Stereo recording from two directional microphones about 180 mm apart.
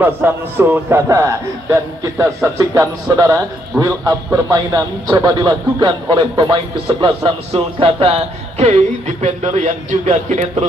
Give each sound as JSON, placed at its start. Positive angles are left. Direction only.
{"t": 0.0, "sound": "a man's voice", "side_deg": -10}